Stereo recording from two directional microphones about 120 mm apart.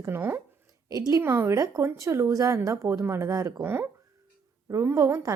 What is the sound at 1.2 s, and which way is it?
Speech, 20° right (ahead or behind).